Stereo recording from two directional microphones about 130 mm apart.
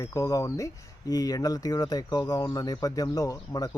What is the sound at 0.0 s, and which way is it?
Speech, 25° left (ahead or behind).